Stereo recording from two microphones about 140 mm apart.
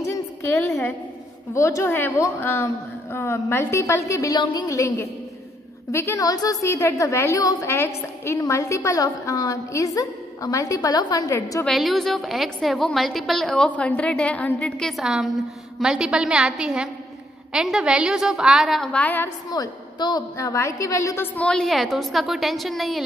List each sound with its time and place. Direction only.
0.4 s a sound: 15° left (ahead or behind)
1.5 s a woman's voice: 20° left (ahead or behind)
11.6 s a woman's voice: centre (ahead or behind)
19.5 s a woman's voice: 30° left (ahead or behind)
21.4 s a woman's voice: 5° left (ahead or behind)